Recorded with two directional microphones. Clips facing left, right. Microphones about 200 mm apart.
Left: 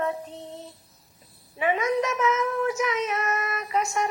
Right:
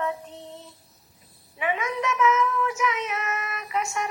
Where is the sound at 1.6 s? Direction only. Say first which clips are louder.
Left 4 dB; 35° left (ahead or behind).